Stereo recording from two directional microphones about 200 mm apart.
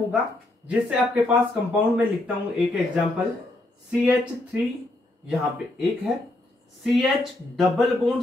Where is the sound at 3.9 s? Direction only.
5° right (ahead or behind).